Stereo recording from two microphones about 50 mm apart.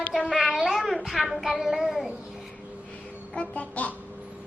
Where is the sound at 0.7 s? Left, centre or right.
Centre.